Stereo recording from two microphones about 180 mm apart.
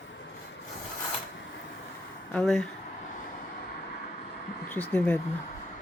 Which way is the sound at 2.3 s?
Centre (ahead or behind).